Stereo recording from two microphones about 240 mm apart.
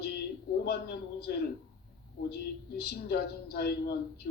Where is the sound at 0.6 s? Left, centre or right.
Left.